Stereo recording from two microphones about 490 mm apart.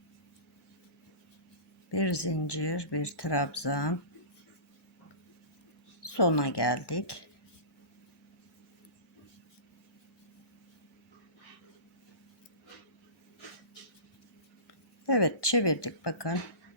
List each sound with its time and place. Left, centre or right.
1.9 s speech: left
6.0 s speech: left
15.0 s speech: left